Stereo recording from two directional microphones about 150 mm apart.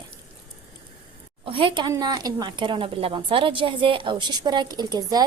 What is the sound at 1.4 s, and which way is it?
Speech, 35° right (ahead or behind).